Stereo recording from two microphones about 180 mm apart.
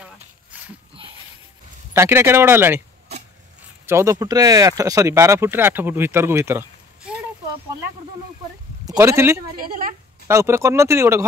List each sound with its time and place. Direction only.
0.0 s a sound: 5° right (ahead or behind)
2.0 s speech: 15° right (ahead or behind)
3.8 s speech: 15° right (ahead or behind)
8.8 s speech: 15° right (ahead or behind)
9.6 s speech: 50° right (ahead or behind)
10.2 s speech: 15° right (ahead or behind)